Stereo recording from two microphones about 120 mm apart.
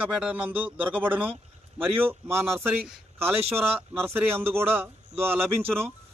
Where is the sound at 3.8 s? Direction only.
20° right (ahead or behind).